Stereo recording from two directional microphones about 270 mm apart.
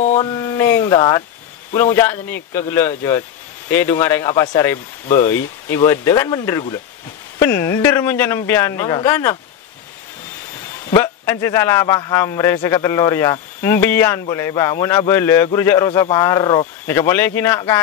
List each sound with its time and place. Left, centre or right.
0.0 s a man's voice: left
10.9 s a man's voice: centre